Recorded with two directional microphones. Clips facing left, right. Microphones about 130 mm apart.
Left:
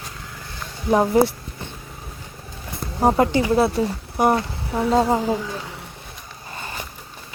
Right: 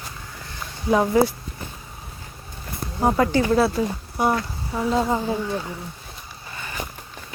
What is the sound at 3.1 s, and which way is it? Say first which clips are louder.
Speech: left 1 dB; 25° left (ahead or behind).